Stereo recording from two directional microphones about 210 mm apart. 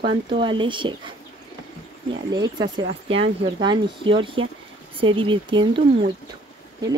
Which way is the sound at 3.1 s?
20° right (ahead or behind).